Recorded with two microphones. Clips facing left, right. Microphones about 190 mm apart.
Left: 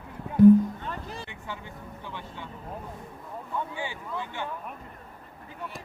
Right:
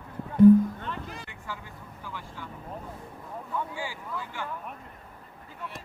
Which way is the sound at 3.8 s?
25° left (ahead or behind).